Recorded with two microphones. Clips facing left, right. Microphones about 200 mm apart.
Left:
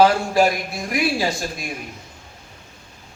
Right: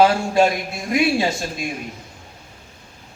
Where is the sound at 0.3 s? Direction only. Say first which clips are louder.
Right 1 dB; 25° right (ahead or behind).